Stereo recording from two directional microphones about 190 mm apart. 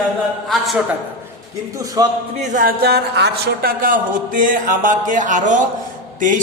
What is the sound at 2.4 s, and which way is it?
Speech, 45° right (ahead or behind).